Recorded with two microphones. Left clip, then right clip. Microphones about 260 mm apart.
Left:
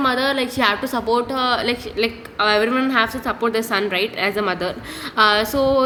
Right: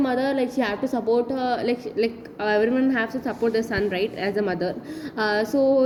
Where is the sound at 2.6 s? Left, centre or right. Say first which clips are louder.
Left 3 dB; left.